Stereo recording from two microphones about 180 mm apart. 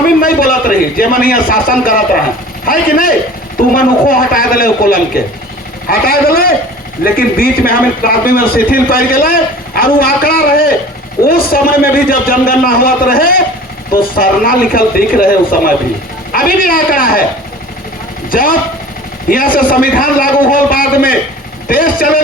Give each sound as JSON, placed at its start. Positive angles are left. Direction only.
{"t": 0.2, "sound": "a man's voice", "side_deg": 50}
{"t": 18.3, "sound": "a man's voice", "side_deg": 50}